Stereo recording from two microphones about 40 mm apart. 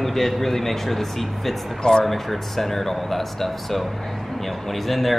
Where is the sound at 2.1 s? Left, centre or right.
Centre.